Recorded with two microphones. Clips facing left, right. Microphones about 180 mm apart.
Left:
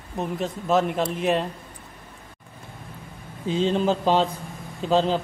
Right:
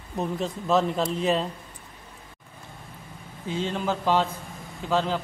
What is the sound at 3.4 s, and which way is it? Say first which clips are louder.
Speech: left 6 dB; 20° left (ahead or behind).